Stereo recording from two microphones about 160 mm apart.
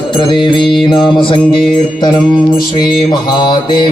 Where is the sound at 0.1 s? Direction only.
30° left (ahead or behind).